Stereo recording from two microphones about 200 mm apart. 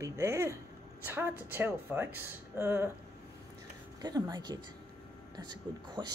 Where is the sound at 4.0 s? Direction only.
20° right (ahead or behind).